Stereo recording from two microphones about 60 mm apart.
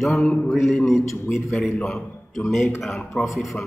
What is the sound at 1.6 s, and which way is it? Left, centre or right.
A man's voice, centre.